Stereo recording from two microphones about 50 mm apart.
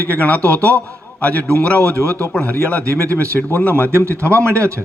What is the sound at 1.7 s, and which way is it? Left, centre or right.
Speech, right.